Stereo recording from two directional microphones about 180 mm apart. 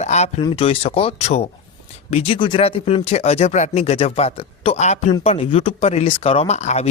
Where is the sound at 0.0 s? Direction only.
40° left (ahead or behind).